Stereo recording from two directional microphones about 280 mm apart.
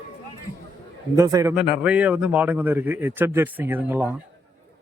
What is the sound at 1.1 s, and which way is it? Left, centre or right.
A man's voice, centre.